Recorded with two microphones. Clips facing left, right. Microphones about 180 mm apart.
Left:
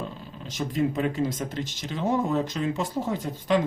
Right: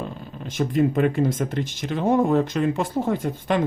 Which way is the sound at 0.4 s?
55° right (ahead or behind).